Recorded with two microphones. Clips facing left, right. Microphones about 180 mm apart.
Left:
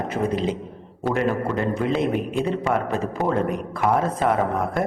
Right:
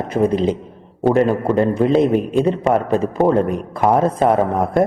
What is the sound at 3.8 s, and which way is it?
Speech, 35° right (ahead or behind).